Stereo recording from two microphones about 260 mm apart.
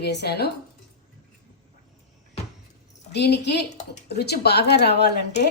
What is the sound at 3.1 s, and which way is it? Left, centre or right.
Speech, left.